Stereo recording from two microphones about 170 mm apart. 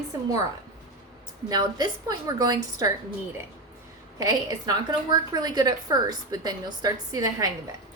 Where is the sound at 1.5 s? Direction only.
25° right (ahead or behind).